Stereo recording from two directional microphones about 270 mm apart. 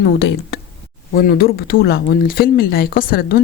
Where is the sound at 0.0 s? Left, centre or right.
Left.